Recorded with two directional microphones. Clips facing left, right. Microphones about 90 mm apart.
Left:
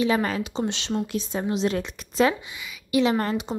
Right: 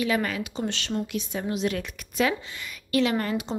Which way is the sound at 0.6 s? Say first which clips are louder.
Left 2 dB; 20° left (ahead or behind).